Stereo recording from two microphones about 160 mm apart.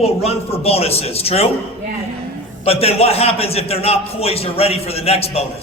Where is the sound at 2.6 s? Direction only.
40° left (ahead or behind).